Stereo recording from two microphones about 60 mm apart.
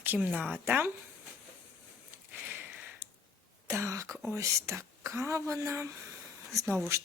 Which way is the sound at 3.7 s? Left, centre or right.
Right.